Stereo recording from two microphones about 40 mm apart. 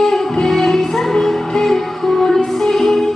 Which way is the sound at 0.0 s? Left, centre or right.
Centre.